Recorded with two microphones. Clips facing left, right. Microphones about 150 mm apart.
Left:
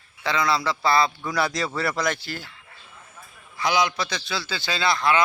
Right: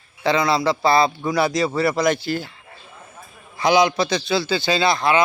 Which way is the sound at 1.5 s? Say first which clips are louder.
Right 7 dB; 10° right (ahead or behind).